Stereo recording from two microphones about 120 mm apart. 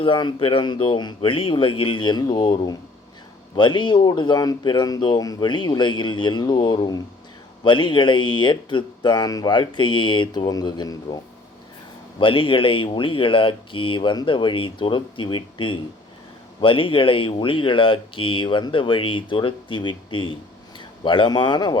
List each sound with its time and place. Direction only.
0.0 s speech: 45° left (ahead or behind)
12.2 s speech: 45° left (ahead or behind)